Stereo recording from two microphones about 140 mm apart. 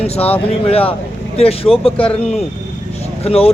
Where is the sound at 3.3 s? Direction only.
45° left (ahead or behind).